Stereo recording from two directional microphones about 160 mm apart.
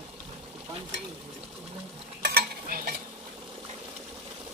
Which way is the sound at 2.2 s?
65° right (ahead or behind).